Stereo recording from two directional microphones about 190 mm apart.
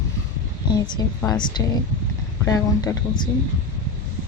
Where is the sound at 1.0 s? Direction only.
20° left (ahead or behind).